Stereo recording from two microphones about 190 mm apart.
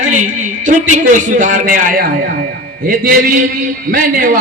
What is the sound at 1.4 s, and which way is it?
A man's voice, 45° right (ahead or behind).